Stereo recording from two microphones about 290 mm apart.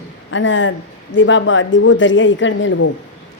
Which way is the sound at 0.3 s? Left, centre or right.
Left.